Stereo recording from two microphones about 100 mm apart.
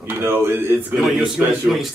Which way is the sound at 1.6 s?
Centre (ahead or behind).